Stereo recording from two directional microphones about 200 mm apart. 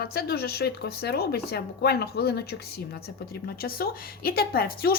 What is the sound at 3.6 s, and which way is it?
A woman's voice, 50° left (ahead or behind).